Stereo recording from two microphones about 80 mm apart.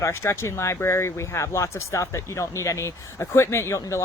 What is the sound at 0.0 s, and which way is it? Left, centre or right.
Speech, left.